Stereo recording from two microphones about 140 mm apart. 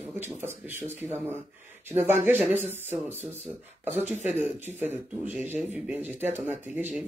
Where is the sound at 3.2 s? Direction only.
55° right (ahead or behind).